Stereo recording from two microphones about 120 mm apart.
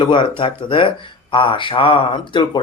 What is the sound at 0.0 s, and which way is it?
A man's voice, 45° left (ahead or behind).